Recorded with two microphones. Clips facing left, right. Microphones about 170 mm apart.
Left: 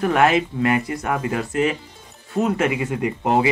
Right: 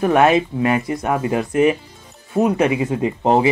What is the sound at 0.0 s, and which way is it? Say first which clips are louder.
Speech: right 3 dB; 20° right (ahead or behind).